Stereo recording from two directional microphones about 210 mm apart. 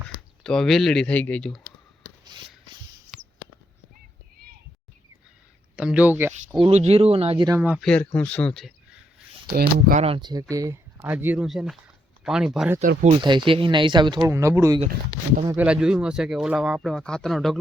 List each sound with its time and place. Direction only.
0.4 s speech: centre (ahead or behind)
2.2 s rub: 20° right (ahead or behind)
4.4 s a sound: 45° right (ahead or behind)
5.7 s speech: 5° right (ahead or behind)
6.6 s speech: 30° right (ahead or behind)
7.6 s speech: 5° right (ahead or behind)
7.9 s speech: 5° left (ahead or behind)
9.5 s speech: 45° right (ahead or behind)
10.0 s speech: 25° right (ahead or behind); by 12.7 s centre (ahead or behind)
12.8 s speech: 40° right (ahead or behind); by 17.6 s centre (ahead or behind)